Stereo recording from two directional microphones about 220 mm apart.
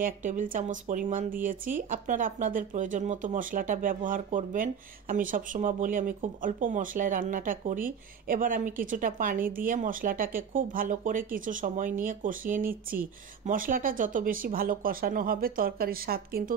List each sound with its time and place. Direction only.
0.0 s speech: 35° right (ahead or behind)